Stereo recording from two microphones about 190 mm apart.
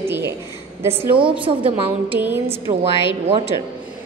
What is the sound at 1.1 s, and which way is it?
Speech, 25° right (ahead or behind).